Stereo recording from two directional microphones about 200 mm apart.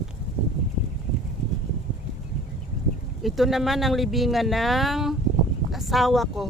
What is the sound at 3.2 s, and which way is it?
Speech, centre (ahead or behind).